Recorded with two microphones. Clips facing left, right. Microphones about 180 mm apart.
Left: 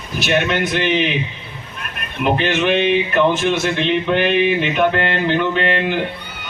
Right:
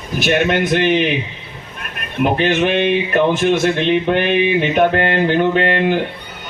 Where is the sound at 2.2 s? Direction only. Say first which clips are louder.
Right 2 dB; 45° right (ahead or behind).